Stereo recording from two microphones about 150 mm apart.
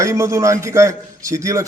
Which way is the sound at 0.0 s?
20° right (ahead or behind).